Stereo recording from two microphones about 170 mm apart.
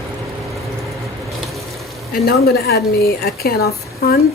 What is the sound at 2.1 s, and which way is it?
Speech, 65° left (ahead or behind).